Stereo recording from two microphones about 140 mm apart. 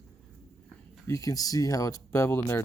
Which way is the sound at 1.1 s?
25° left (ahead or behind).